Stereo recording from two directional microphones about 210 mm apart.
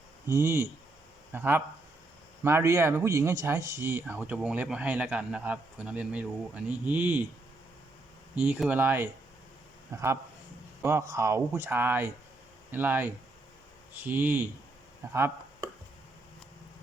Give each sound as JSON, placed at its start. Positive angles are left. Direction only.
{"t": 0.3, "sound": "speech", "side_deg": -15}
{"t": 8.4, "sound": "speech", "side_deg": -5}
{"t": 15.1, "sound": "a sound", "side_deg": -10}